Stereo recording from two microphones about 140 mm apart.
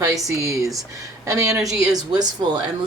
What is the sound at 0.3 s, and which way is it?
Speech, 25° right (ahead or behind).